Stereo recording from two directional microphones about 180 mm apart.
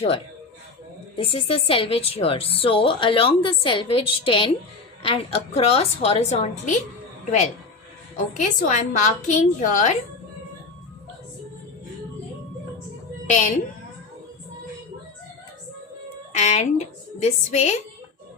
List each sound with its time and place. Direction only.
1.1 s a woman's voice: 30° left (ahead or behind)
8.3 s a woman's voice: 45° left (ahead or behind)
13.2 s a woman's voice: 40° left (ahead or behind)
16.3 s a woman's voice: 40° left (ahead or behind)